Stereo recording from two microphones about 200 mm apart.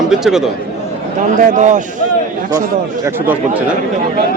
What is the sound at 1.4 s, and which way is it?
Speech, 40° right (ahead or behind).